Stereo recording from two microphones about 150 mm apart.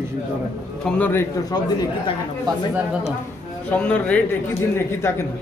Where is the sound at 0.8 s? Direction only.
10° left (ahead or behind).